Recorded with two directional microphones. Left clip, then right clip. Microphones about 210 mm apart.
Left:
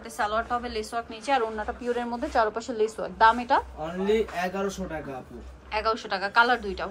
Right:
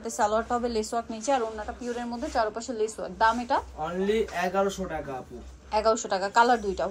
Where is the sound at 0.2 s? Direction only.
20° right (ahead or behind).